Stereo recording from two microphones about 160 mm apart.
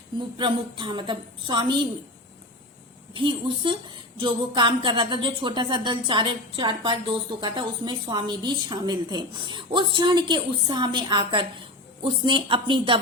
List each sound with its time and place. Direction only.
0.3 s a woman's voice: 30° right (ahead or behind)
3.2 s a woman's voice: 30° right (ahead or behind)